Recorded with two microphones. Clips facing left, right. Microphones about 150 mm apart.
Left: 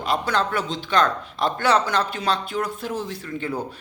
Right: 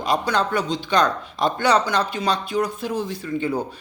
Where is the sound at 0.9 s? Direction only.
15° right (ahead or behind).